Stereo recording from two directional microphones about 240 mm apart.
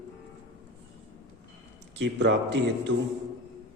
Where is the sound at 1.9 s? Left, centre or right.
Right.